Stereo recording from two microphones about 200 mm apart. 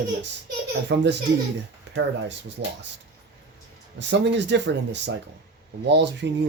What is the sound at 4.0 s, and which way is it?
Speech, 65° right (ahead or behind).